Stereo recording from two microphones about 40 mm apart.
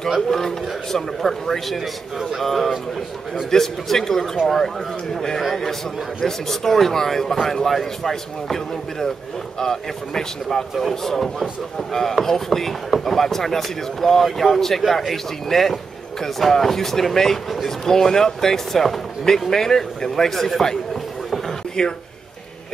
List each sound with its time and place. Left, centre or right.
0.3 s a man's voice: centre
2.1 s speech: centre
2.4 s a man's voice: centre
5.4 s a man's voice: centre
21.8 s speech: centre